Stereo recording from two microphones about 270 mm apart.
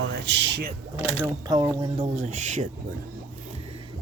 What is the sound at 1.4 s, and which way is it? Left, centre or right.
Speech, centre.